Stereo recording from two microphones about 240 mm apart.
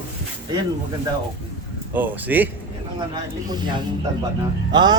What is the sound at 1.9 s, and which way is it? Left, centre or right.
Speech, centre.